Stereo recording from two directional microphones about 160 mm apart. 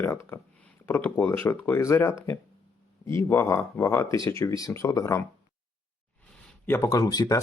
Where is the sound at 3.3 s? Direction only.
15° left (ahead or behind).